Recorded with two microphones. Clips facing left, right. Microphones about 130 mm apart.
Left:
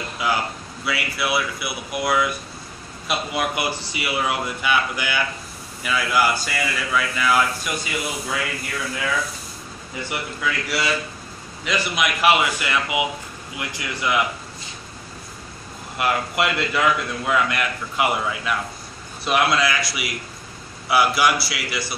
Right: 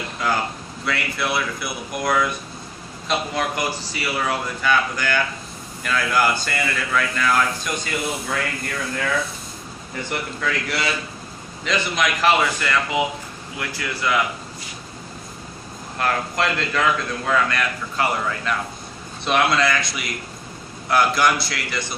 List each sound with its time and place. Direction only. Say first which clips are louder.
0.2 s a man's voice: even; 5° left (ahead or behind)
10.0 s a man's voice: even; 5° left (ahead or behind)
16.0 s a man's voice: even; 10° left (ahead or behind)